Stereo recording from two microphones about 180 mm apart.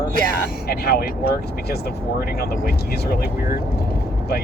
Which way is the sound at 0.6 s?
60° left (ahead or behind).